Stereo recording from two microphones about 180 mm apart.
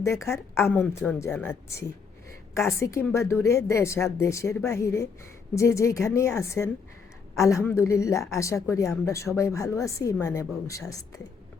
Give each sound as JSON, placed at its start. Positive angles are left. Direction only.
{"t": 0.0, "sound": "a woman's voice", "side_deg": 15}